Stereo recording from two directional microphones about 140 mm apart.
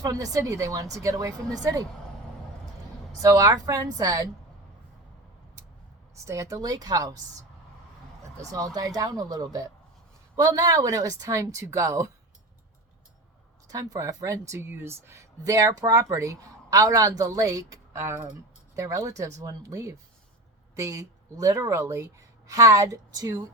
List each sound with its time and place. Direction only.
0.0 s speech: 25° right (ahead or behind)
3.2 s speech: 25° right (ahead or behind)
6.2 s speech: 20° right (ahead or behind)
8.5 s speech: 25° right (ahead or behind)
13.7 s speech: 25° right (ahead or behind)